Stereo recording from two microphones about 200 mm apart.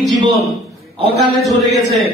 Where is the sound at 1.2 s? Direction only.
Centre (ahead or behind).